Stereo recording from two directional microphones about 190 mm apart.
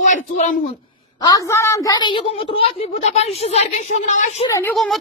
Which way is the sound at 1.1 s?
20° left (ahead or behind).